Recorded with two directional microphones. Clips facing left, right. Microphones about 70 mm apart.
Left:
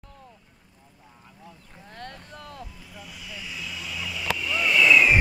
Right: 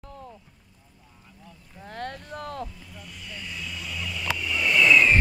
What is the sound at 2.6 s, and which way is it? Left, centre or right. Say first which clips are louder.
Vehicle: right 4 dB; centre.